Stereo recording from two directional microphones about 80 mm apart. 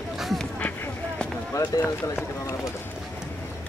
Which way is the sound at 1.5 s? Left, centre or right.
Left.